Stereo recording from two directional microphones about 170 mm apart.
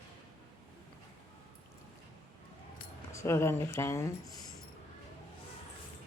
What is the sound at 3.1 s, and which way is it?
Speech, 15° left (ahead or behind).